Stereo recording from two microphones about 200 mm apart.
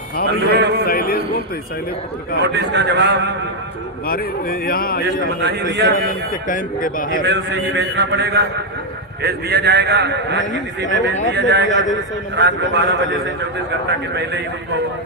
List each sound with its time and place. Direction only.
0.5 s a man's voice: 55° right (ahead or behind)
0.9 s a man's voice: 50° left (ahead or behind)
2.4 s a man's voice: 60° right (ahead or behind)
4.0 s speech: 45° left (ahead or behind)
5.0 s a man's voice: 55° right (ahead or behind)
6.1 s speech: 45° left (ahead or behind)
7.3 s a man's voice: 60° right (ahead or behind)